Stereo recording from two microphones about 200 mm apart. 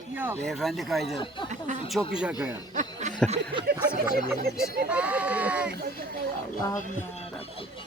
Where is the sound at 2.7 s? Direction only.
40° right (ahead or behind).